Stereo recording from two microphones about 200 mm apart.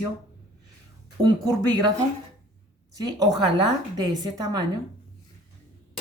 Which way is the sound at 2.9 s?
20° right (ahead or behind).